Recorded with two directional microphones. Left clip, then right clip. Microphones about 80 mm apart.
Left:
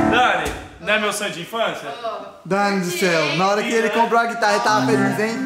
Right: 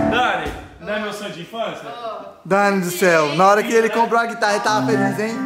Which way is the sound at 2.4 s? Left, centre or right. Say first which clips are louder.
Right 3 dB; right.